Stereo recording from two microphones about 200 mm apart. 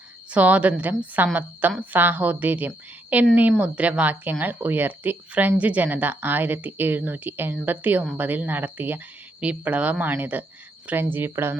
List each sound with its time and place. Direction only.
0.3 s speech: 5° right (ahead or behind)